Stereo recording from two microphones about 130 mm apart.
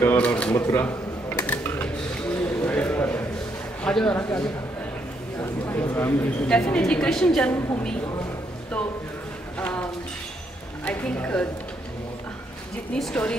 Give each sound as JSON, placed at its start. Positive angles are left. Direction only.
{"t": 0.0, "sound": "speech", "side_deg": 10}
{"t": 1.4, "sound": "a sound", "side_deg": 15}
{"t": 3.8, "sound": "a woman's voice", "side_deg": 10}
{"t": 9.6, "sound": "speech", "side_deg": 10}
{"t": 10.9, "sound": "a woman's voice", "side_deg": 10}
{"t": 12.9, "sound": "speech", "side_deg": 10}